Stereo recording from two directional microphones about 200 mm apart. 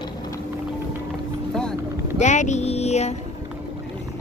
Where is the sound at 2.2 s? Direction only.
35° left (ahead or behind).